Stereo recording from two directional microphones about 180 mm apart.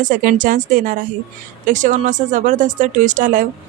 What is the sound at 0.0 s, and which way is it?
A woman's voice, 50° right (ahead or behind).